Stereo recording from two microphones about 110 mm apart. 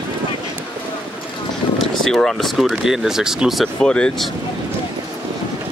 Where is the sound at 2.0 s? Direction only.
5° left (ahead or behind).